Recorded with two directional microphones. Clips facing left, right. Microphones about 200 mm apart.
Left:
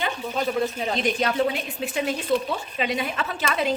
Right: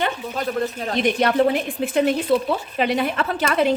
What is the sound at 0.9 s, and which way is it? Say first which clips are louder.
A woman's voice: right 6 dB; 60° right (ahead or behind).